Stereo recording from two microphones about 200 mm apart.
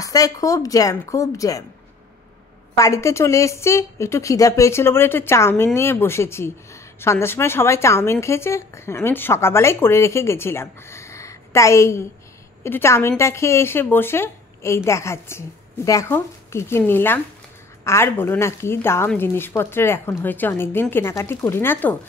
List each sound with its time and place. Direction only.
0.0 s speech: 15° left (ahead or behind)
2.7 s speech: 15° left (ahead or behind)